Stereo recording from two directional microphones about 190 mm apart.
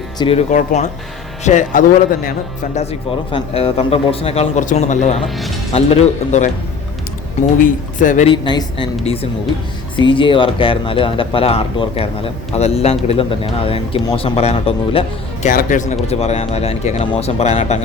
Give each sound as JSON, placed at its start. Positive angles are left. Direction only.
{"t": 0.2, "sound": "speech", "side_deg": 30}
{"t": 3.3, "sound": "speech", "side_deg": 30}
{"t": 7.6, "sound": "speech", "side_deg": 40}
{"t": 8.3, "sound": "speech", "side_deg": 25}
{"t": 15.4, "sound": "speech", "side_deg": 40}